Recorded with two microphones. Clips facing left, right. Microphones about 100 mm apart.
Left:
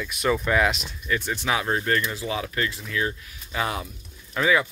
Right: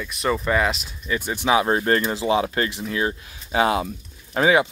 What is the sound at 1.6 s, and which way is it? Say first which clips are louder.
Speech: right 4 dB; 35° right (ahead or behind).